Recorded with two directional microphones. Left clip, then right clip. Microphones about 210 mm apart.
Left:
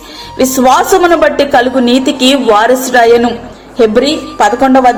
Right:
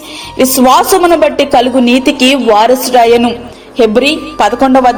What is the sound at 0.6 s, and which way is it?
Speech, 25° right (ahead or behind).